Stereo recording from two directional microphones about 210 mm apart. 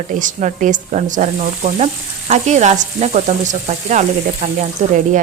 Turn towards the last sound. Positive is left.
turn(degrees=-35)  # may be behind; listen again after turning